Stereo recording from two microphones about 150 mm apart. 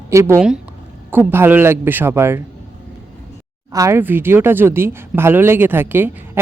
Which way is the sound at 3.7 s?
20° right (ahead or behind).